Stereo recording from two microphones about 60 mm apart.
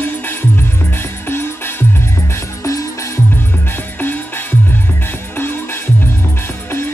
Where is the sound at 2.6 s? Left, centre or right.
Left.